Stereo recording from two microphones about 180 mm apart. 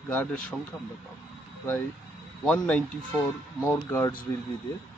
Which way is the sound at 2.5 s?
10° left (ahead or behind).